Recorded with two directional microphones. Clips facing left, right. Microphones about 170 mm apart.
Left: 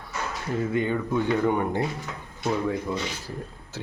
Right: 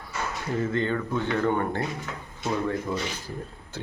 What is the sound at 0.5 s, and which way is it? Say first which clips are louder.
Speech: left 1 dB; 10° left (ahead or behind).